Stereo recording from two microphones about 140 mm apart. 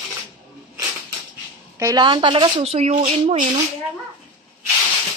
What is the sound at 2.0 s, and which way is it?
Speech, 35° right (ahead or behind).